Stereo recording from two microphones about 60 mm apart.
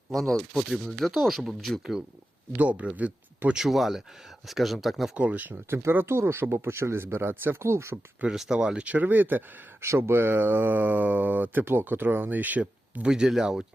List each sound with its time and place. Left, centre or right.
0.1 s speech: centre
1.8 s speech: centre
2.6 s speech: right
3.5 s speech: centre
5.1 s speech: right
5.6 s speech: right
7.6 s speech: right
8.3 s speech: centre; by 9.6 s right
9.8 s speech: right
11.6 s speech: right
13.1 s speech: centre